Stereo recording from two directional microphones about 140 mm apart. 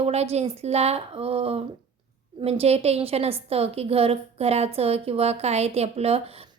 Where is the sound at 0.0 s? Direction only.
50° right (ahead or behind).